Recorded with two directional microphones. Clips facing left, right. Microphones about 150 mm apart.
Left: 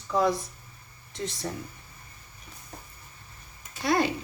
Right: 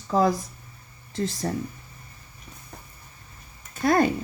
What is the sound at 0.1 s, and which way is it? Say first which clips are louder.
Speech: right 3 dB; 40° right (ahead or behind).